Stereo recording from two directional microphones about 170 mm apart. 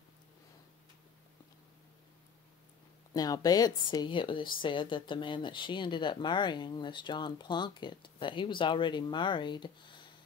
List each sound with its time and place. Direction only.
3.1 s speech: 20° left (ahead or behind)